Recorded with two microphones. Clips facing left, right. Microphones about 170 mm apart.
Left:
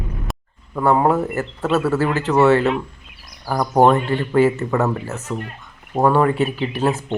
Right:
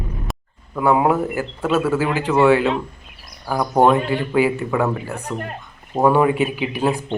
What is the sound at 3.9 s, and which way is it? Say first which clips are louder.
Speech: even; 10° right (ahead or behind).